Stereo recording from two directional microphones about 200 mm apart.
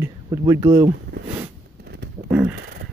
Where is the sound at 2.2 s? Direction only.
5° right (ahead or behind).